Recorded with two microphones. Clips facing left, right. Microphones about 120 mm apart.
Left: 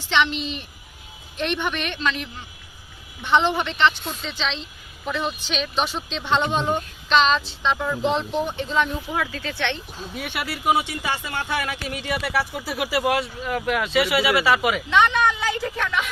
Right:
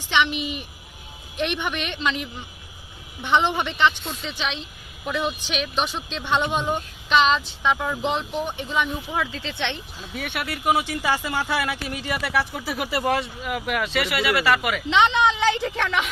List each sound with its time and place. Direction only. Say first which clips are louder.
0.1 s speech: left 1 dB; 10° right (ahead or behind)
10.1 s speech: even; 5° left (ahead or behind)
14.9 s a woman's voice: right 1 dB; 20° right (ahead or behind)